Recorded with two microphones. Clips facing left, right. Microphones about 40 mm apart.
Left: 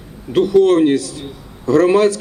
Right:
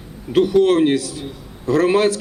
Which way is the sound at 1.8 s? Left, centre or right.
Right.